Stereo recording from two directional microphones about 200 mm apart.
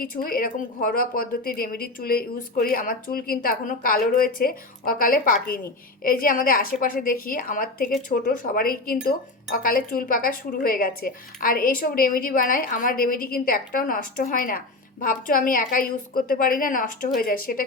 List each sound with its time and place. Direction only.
0.0 s a woman's voice: 45° left (ahead or behind)